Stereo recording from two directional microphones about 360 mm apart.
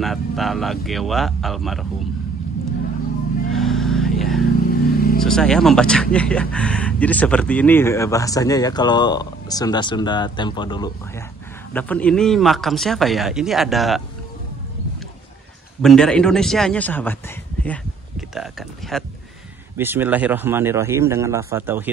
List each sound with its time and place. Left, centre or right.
0.0 s speech: centre
3.5 s a sound: centre
4.6 s vehicle: left
5.2 s speech: centre
15.8 s speech: centre
18.3 s a man's voice: centre